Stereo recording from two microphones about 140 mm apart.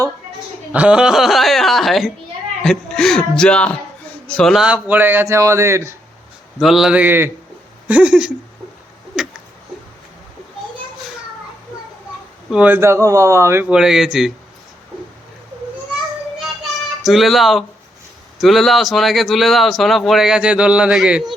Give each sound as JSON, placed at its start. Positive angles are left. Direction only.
{"t": 0.7, "sound": "a man's voice", "side_deg": -10}
{"t": 6.6, "sound": "speech", "side_deg": 0}
{"t": 9.2, "sound": "a sound", "side_deg": -5}
{"t": 12.5, "sound": "speech", "side_deg": -10}
{"t": 13.7, "sound": "a man's voice", "side_deg": -5}
{"t": 17.0, "sound": "a man's voice", "side_deg": 0}